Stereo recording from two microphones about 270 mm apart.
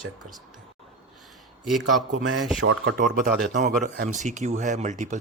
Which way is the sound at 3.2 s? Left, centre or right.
Right.